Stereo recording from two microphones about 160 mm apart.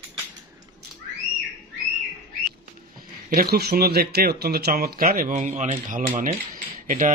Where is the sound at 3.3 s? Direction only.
75° right (ahead or behind); by 6.3 s 55° right (ahead or behind).